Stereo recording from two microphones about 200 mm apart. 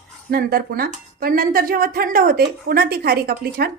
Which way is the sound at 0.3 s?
50° right (ahead or behind).